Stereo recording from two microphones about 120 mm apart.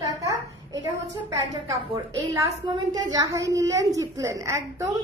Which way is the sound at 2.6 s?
35° right (ahead or behind).